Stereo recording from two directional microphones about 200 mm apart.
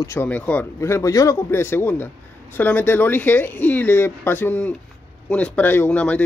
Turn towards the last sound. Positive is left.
turn(degrees=5)  # may be behind; listen again after turning